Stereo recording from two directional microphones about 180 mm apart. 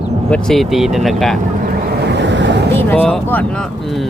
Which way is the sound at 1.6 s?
60° right (ahead or behind).